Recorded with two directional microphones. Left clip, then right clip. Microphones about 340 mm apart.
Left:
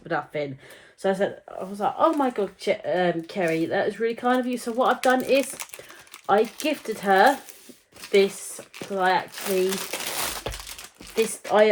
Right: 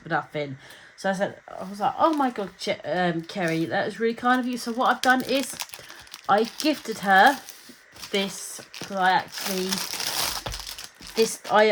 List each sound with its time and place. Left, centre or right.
0.1 s speech: right